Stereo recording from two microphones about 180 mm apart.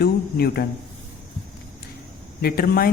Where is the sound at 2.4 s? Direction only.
55° left (ahead or behind).